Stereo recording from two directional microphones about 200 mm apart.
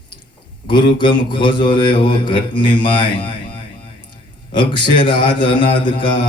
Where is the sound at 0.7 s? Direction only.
25° left (ahead or behind).